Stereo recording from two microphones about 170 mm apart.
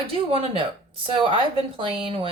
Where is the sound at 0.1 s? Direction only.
35° right (ahead or behind).